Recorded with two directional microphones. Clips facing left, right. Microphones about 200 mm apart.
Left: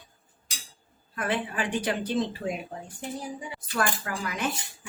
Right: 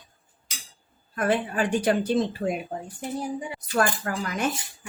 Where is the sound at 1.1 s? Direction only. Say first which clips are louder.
Right 5 dB; 45° right (ahead or behind).